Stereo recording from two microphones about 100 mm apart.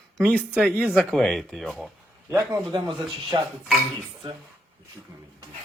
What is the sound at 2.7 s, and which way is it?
Speech, 50° right (ahead or behind).